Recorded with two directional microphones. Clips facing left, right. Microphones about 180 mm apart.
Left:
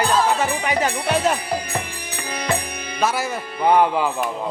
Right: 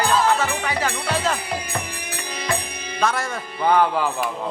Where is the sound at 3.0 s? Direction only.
5° left (ahead or behind).